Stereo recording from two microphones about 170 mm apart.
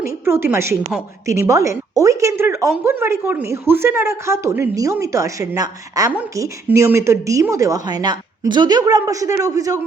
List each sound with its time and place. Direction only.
0.0 s a woman's voice: 15° right (ahead or behind)